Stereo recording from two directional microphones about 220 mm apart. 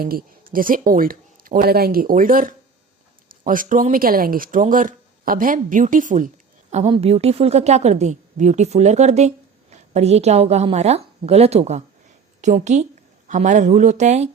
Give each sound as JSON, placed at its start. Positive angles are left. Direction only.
{"t": 0.0, "sound": "a woman's voice", "side_deg": -40}